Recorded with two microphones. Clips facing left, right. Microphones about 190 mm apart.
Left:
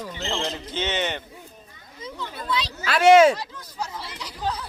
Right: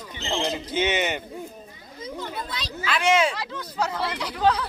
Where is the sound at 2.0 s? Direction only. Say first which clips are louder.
Right 2 dB; 45° right (ahead or behind).